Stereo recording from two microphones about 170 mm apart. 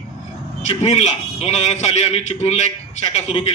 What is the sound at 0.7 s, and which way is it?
A man's voice, 40° left (ahead or behind).